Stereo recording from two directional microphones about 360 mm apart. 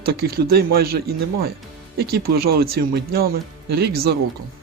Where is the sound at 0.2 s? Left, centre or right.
Right.